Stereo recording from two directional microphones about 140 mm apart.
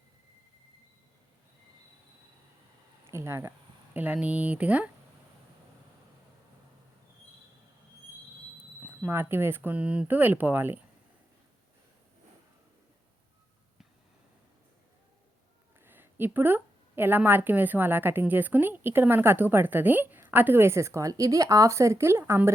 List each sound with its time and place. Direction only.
3.0 s a woman's voice: 20° right (ahead or behind)
8.9 s a woman's voice: 15° right (ahead or behind)
15.8 s a woman's voice: 15° right (ahead or behind)